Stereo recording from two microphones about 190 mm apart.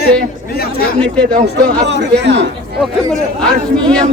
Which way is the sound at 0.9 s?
5° left (ahead or behind).